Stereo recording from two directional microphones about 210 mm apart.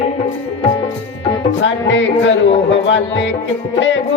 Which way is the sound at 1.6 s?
60° left (ahead or behind).